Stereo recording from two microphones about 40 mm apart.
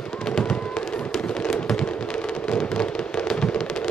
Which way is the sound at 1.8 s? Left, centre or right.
Left.